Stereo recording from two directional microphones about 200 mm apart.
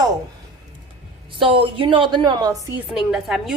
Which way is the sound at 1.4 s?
25° right (ahead or behind).